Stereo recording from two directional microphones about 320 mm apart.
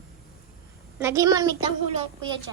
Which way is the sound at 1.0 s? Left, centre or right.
Centre.